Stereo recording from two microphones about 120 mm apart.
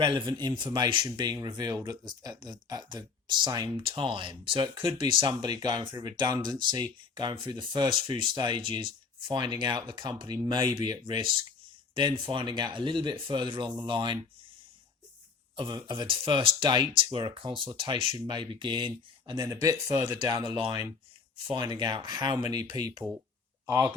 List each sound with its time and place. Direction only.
0.0 s speech: 40° right (ahead or behind)
3.8 s speech: 50° right (ahead or behind)
15.5 s speech: 40° right (ahead or behind)
19.5 s speech: 25° right (ahead or behind)
20.6 s speech: 40° right (ahead or behind)